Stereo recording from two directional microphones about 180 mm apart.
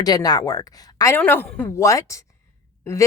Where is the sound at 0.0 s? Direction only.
20° left (ahead or behind).